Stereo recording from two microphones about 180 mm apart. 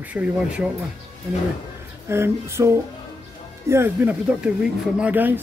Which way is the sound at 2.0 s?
15° right (ahead or behind).